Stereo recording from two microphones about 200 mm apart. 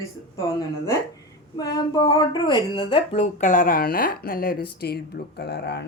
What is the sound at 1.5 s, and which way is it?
Speech, 15° left (ahead or behind).